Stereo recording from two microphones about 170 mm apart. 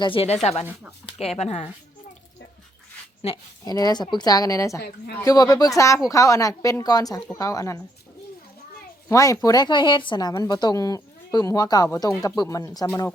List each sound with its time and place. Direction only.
0.0 s speech: 30° left (ahead or behind)
3.3 s speech: 35° left (ahead or behind)
3.6 s speech: 20° left (ahead or behind)
9.0 s speech: 20° left (ahead or behind)
12.9 s speech: 10° left (ahead or behind)